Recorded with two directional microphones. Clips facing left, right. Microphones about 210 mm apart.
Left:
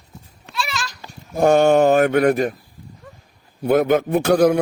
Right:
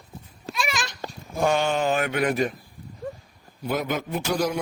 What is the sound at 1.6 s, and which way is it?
Speech, 65° left (ahead or behind).